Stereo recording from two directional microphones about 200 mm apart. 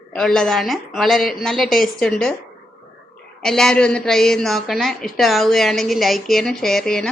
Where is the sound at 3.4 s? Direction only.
5° left (ahead or behind).